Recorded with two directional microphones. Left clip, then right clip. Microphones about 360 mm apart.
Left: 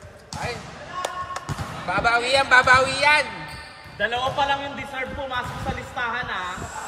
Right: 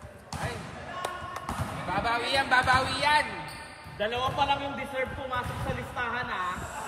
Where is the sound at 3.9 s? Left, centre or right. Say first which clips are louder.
Left 5 dB; left.